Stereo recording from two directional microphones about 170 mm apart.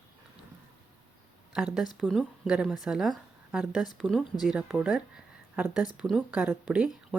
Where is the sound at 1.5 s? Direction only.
Centre (ahead or behind).